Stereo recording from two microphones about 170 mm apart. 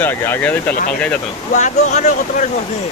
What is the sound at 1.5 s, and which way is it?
Speech, 45° left (ahead or behind).